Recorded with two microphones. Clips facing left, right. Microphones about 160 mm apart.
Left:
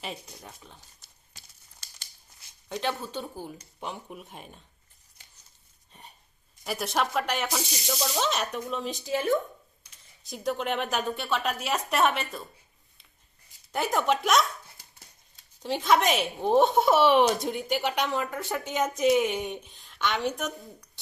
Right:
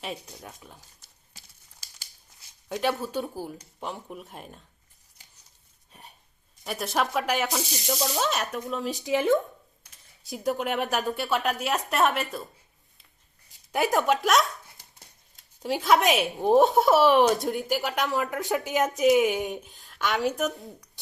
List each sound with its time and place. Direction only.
0.0 s a woman's voice: centre (ahead or behind)
2.6 s a woman's voice: 10° right (ahead or behind)
5.9 s a sound: 5° right (ahead or behind)
6.7 s a woman's voice: centre (ahead or behind)
9.0 s speech: 20° right (ahead or behind)
10.2 s a woman's voice: 5° right (ahead or behind)
13.8 s a woman's voice: centre (ahead or behind)
15.6 s a woman's voice: 5° right (ahead or behind)
18.3 s speech: 20° right (ahead or behind)
18.6 s a woman's voice: centre (ahead or behind)